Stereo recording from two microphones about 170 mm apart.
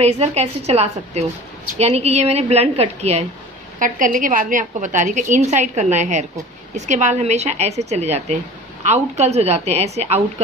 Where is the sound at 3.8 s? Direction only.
50° right (ahead or behind).